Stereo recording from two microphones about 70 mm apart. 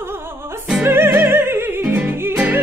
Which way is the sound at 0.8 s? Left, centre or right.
Right.